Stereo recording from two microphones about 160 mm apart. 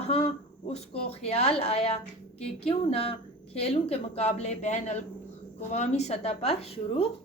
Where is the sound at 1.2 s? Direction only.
40° left (ahead or behind).